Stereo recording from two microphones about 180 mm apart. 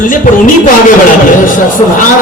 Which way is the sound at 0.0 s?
50° left (ahead or behind).